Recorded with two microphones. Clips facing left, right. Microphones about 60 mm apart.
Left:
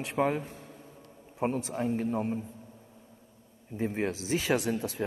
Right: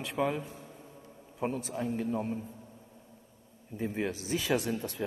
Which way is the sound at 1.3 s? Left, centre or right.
Left.